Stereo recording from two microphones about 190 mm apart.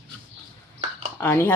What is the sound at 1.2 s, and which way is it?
Speech, 10° left (ahead or behind).